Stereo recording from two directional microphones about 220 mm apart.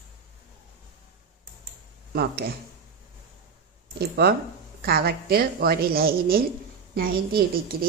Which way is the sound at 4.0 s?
45° right (ahead or behind).